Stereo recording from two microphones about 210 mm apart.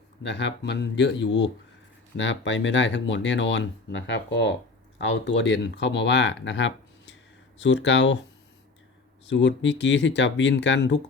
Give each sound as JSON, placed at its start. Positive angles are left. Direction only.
{"t": 0.2, "sound": "speech", "side_deg": 55}
{"t": 9.3, "sound": "speech", "side_deg": 60}